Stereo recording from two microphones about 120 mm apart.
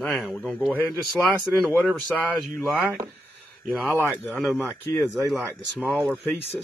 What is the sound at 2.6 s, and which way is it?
Speech, 5° right (ahead or behind).